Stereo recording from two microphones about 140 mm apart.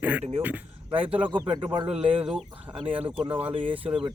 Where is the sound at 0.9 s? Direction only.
40° right (ahead or behind).